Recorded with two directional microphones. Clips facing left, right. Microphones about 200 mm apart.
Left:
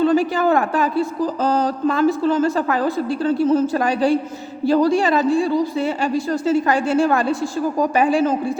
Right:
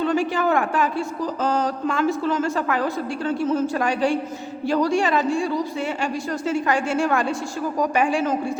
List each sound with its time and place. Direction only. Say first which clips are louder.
0.0 s speech: left 5 dB; 35° left (ahead or behind)